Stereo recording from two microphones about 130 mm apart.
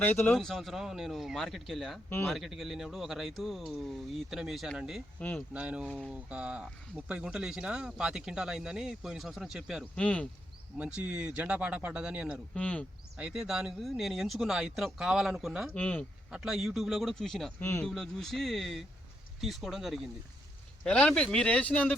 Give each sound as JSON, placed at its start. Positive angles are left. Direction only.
{"t": 0.0, "sound": "speech", "side_deg": 15}
{"t": 0.3, "sound": "speech", "side_deg": 0}
{"t": 2.0, "sound": "speech", "side_deg": 15}
{"t": 2.3, "sound": "speech", "side_deg": 0}
{"t": 10.0, "sound": "speech", "side_deg": 10}
{"t": 10.8, "sound": "speech", "side_deg": -10}
{"t": 12.5, "sound": "speech", "side_deg": 10}
{"t": 13.1, "sound": "speech", "side_deg": -5}
{"t": 15.7, "sound": "speech", "side_deg": 10}
{"t": 16.3, "sound": "speech", "side_deg": -5}
{"t": 17.6, "sound": "speech", "side_deg": 20}
{"t": 17.8, "sound": "speech", "side_deg": 5}